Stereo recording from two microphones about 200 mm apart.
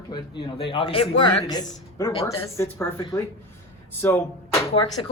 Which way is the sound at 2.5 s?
10° left (ahead or behind).